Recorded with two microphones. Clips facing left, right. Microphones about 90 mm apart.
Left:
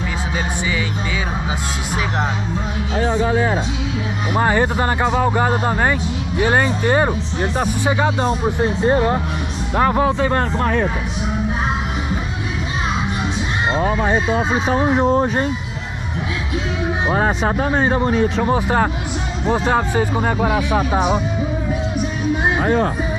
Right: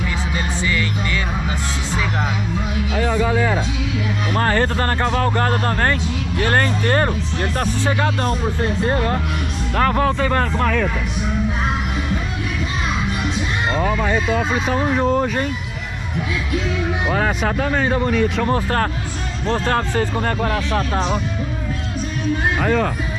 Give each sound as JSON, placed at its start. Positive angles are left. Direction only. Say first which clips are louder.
{"t": 3.0, "sound": "speech", "louder": "left 1 dB", "side_deg": 25}
{"t": 4.4, "sound": "speech", "louder": "left 2 dB", "side_deg": 15}
{"t": 13.7, "sound": "speech", "louder": "left 2 dB", "side_deg": 30}
{"t": 17.1, "sound": "speech", "louder": "left 2 dB", "side_deg": 30}
{"t": 18.5, "sound": "speech", "louder": "left 2 dB", "side_deg": 10}
{"t": 22.3, "sound": "speech", "louder": "left 1 dB", "side_deg": 25}